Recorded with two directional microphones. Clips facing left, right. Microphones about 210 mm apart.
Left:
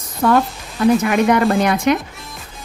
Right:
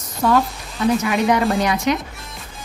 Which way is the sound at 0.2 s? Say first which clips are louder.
Left 2 dB; 55° left (ahead or behind).